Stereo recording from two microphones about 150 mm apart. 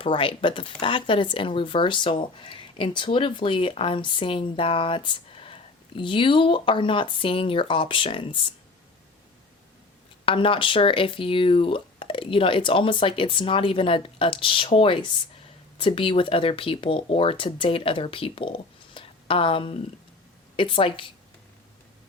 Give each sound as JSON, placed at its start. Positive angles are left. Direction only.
{"t": 0.0, "sound": "speech", "side_deg": 35}
{"t": 10.2, "sound": "speech", "side_deg": 35}